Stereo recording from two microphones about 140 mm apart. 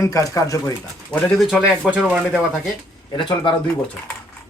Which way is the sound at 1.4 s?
Centre (ahead or behind).